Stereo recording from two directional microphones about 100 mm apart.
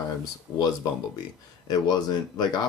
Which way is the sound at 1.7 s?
45° left (ahead or behind).